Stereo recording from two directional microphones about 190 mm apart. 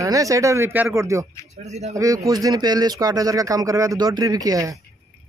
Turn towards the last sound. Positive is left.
turn(degrees=-20)  # may be behind; listen again after turning